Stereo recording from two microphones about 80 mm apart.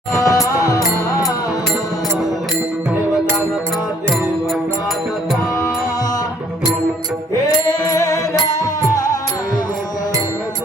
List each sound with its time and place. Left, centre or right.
0.1 s music: left
7.7 s music: left